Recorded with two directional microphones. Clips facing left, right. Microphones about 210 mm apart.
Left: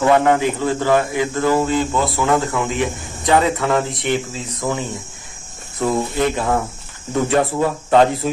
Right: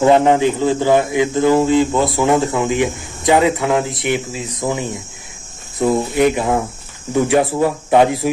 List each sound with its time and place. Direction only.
0.0 s speech: 20° right (ahead or behind)